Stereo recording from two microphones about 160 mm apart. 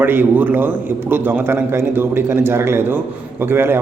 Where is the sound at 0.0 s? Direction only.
15° right (ahead or behind).